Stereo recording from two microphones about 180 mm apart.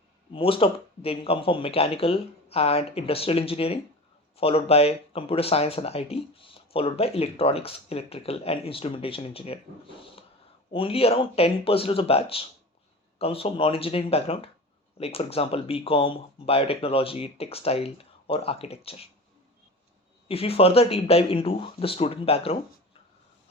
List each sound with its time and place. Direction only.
0.3 s speech: 30° left (ahead or behind)
20.2 s speech: 35° left (ahead or behind)